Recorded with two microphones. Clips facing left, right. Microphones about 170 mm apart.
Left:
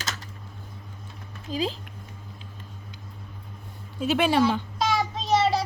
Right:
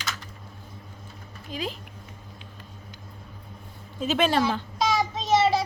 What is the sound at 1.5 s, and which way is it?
Speech, 30° left (ahead or behind).